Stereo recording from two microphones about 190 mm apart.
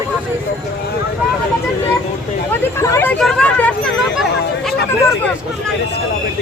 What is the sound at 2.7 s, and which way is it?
Speech, 10° left (ahead or behind).